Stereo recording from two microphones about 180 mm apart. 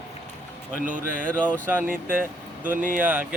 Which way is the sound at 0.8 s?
50° right (ahead or behind).